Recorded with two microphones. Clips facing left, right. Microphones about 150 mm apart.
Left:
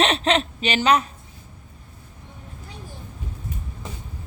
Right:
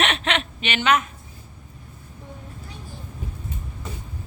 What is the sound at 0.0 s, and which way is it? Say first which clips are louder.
Speech: left 4 dB; 35° left (ahead or behind).